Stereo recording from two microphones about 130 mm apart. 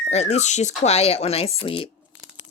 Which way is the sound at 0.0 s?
55° left (ahead or behind).